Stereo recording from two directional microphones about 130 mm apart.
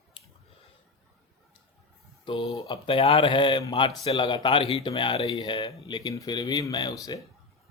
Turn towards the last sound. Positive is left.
turn(degrees=30)  # may be behind; listen again after turning